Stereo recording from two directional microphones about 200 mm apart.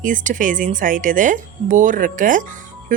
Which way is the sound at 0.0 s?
40° right (ahead or behind).